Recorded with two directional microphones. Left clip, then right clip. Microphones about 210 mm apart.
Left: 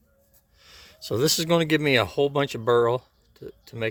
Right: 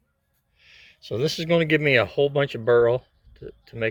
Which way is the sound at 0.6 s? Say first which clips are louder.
Left 4 dB; 25° left (ahead or behind).